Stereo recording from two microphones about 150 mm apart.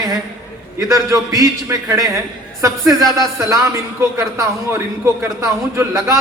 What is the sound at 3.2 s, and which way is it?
Speech, 20° right (ahead or behind).